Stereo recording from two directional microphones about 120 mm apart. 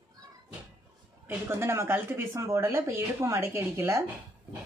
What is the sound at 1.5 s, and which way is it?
Speech, 20° right (ahead or behind).